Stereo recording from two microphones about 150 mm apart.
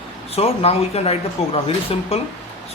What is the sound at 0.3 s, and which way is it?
Speech, 40° left (ahead or behind).